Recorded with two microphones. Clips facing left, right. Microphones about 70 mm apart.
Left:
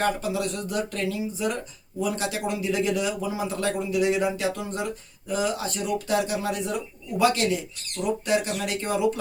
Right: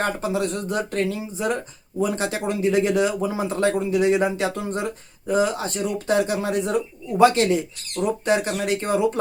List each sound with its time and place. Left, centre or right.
0.0 s speech: right